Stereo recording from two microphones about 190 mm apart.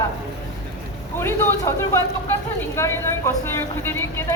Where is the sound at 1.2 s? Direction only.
10° left (ahead or behind).